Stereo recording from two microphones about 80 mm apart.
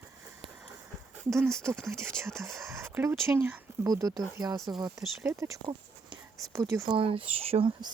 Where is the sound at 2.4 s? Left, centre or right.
Right.